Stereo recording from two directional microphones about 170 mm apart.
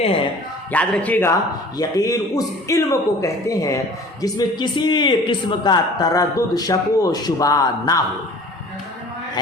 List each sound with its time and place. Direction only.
0.7 s a man's voice: 10° left (ahead or behind)
1.8 s a man's voice: 20° left (ahead or behind)